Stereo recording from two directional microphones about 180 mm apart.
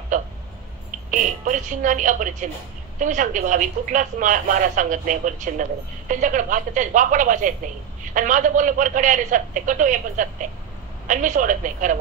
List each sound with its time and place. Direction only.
1.4 s speech: 45° right (ahead or behind)